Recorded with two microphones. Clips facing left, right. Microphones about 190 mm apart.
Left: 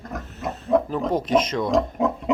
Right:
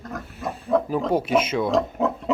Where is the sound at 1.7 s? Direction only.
15° left (ahead or behind).